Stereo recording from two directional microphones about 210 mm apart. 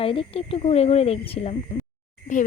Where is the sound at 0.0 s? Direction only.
25° left (ahead or behind).